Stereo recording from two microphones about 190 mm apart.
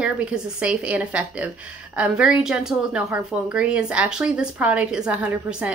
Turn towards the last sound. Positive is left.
turn(degrees=-5)  # may be behind; listen again after turning